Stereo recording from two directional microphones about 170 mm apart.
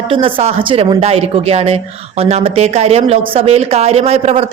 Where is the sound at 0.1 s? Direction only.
30° right (ahead or behind).